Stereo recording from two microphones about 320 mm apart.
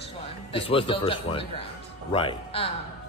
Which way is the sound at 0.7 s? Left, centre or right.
Centre.